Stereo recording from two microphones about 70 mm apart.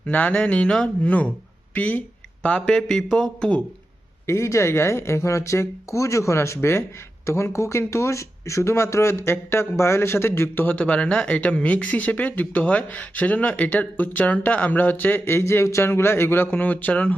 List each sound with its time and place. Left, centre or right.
0.0 s speech: left
1.7 s speech: left
4.3 s speech: left